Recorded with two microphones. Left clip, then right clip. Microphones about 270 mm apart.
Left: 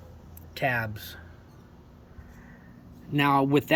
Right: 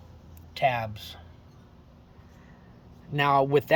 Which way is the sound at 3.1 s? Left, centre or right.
Centre.